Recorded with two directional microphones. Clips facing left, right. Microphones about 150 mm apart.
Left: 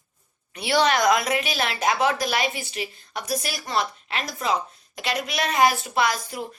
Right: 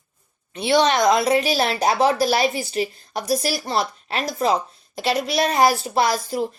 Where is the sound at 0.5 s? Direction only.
20° right (ahead or behind).